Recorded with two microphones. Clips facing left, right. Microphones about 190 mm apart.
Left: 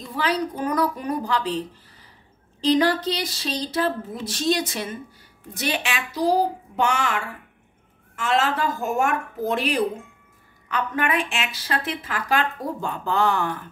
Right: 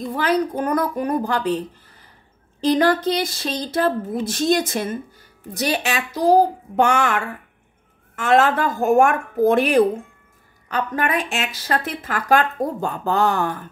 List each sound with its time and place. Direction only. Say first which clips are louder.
0.1 s a woman's voice: right 4 dB; 50° right (ahead or behind)
10.7 s a woman's voice: right 2 dB; 40° right (ahead or behind)